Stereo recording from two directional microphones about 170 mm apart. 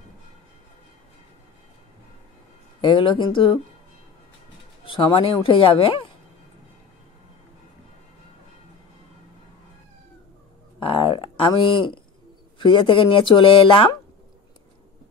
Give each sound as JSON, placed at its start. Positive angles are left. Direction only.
{"t": 2.8, "sound": "speech", "side_deg": 30}
{"t": 4.8, "sound": "speech", "side_deg": 30}
{"t": 10.8, "sound": "a sound", "side_deg": 30}
{"t": 12.5, "sound": "speech", "side_deg": 30}